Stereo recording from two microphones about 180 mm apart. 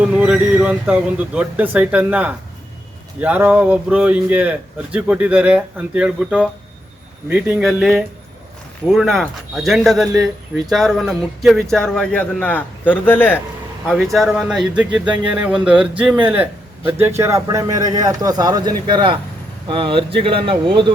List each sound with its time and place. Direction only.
0.0 s a man's voice: 5° right (ahead or behind); by 20.9 s 30° right (ahead or behind)